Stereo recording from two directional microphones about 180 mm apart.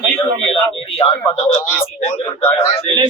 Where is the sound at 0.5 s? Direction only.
30° left (ahead or behind).